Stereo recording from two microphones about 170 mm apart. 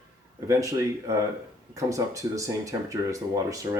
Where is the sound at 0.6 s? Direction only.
15° right (ahead or behind).